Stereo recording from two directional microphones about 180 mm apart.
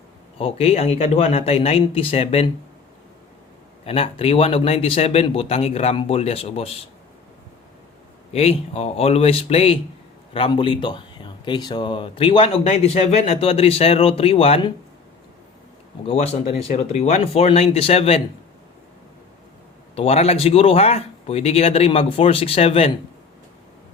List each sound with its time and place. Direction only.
0.3 s speech: 35° left (ahead or behind)
3.8 s speech: 30° left (ahead or behind)
8.3 s speech: 35° left (ahead or behind)
16.0 s speech: 35° left (ahead or behind)
20.0 s speech: 35° left (ahead or behind)